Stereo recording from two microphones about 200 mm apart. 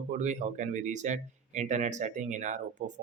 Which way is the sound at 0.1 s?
35° right (ahead or behind).